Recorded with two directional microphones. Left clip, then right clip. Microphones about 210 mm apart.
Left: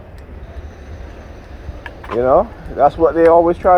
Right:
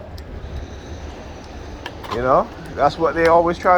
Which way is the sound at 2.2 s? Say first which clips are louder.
Left 4 dB; 45° left (ahead or behind).